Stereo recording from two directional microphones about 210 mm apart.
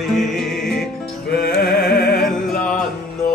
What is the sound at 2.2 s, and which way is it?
Music, centre (ahead or behind).